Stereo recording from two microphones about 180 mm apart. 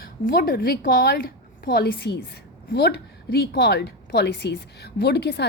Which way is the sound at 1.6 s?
65° left (ahead or behind).